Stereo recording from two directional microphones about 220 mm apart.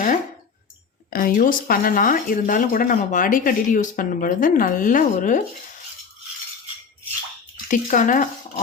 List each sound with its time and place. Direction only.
1.1 s speech: 40° left (ahead or behind)
7.7 s speech: 35° left (ahead or behind)